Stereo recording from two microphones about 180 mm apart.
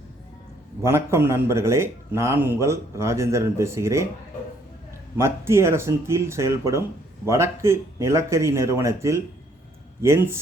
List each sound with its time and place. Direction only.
0.8 s a man's voice: 15° right (ahead or behind)
5.1 s a man's voice: 15° right (ahead or behind)